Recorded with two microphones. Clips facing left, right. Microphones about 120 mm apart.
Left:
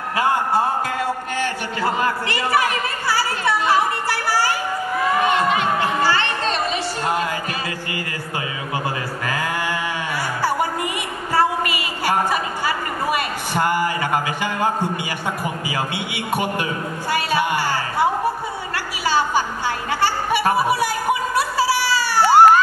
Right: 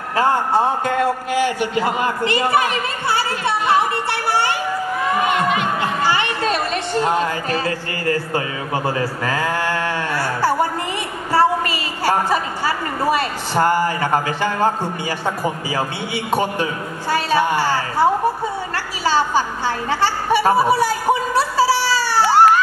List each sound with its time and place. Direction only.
0.1 s a man's voice: 10° left (ahead or behind)
1.3 s a man's voice: 15° right (ahead or behind)
6.0 s speech: 15° right (ahead or behind); by 7.6 s 5° left (ahead or behind)
9.2 s a sound: 10° left (ahead or behind)
13.6 s speech: 45° right (ahead or behind)
14.4 s a man's voice: 15° left (ahead or behind)
19.0 s a sound: 15° left (ahead or behind)